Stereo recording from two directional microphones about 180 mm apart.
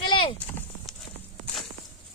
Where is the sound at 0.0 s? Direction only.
30° left (ahead or behind).